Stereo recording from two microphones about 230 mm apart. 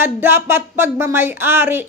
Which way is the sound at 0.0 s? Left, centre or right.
Centre.